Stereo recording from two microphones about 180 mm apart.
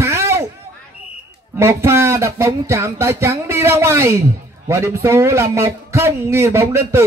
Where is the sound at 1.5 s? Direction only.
15° right (ahead or behind).